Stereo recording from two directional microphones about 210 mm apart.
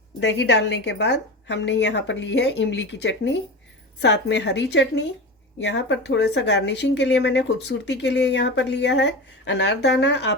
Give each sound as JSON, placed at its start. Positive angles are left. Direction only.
{"t": 0.2, "sound": "a woman's voice", "side_deg": 55}